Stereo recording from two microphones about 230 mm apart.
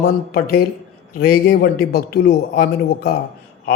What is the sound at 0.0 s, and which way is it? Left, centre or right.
A man's voice, left.